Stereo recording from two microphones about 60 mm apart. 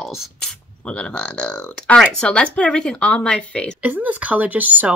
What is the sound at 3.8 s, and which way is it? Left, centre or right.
Speech, right.